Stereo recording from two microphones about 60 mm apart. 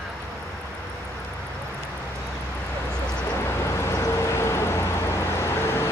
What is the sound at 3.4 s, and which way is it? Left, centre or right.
Vehicle, left.